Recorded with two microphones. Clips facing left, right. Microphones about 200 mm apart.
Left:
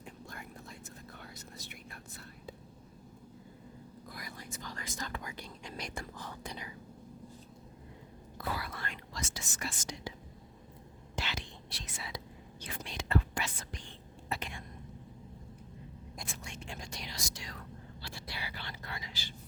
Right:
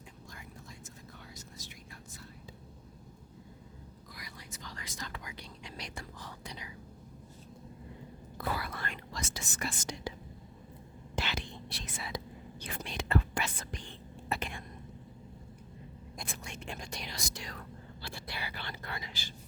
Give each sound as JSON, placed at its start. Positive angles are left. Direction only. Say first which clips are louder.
{"t": 0.0, "sound": "whispering", "louder": "left 4 dB", "side_deg": 60}
{"t": 4.1, "sound": "whispering", "louder": "left 4 dB", "side_deg": 50}
{"t": 8.4, "sound": "whispering", "louder": "right 2 dB", "side_deg": -55}
{"t": 11.1, "sound": "whispering", "louder": "right 3 dB", "side_deg": -55}
{"t": 16.1, "sound": "whispering", "louder": "right 2 dB", "side_deg": -55}